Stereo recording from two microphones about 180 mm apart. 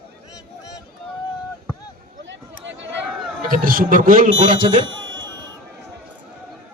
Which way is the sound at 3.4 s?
50° right (ahead or behind).